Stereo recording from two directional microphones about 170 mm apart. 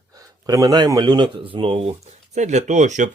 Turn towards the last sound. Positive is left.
turn(degrees=-45)  # may be behind; listen again after turning